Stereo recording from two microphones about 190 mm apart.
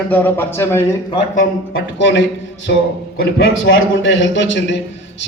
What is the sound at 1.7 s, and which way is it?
Speech, 70° left (ahead or behind).